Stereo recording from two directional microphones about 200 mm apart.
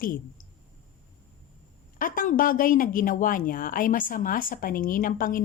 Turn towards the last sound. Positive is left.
turn(degrees=45)  # may be behind; listen again after turning